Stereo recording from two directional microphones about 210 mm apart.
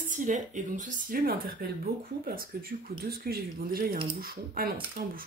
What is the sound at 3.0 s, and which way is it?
Speech, 45° right (ahead or behind).